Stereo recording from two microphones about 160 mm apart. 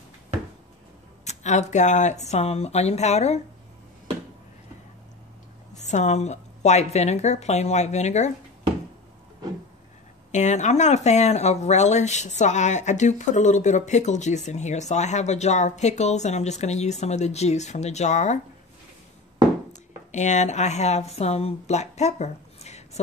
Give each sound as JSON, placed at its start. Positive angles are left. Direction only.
{"t": 1.2, "sound": "speech", "side_deg": 45}
{"t": 5.8, "sound": "speech", "side_deg": 45}
{"t": 10.3, "sound": "speech", "side_deg": 45}
{"t": 19.7, "sound": "speech", "side_deg": 50}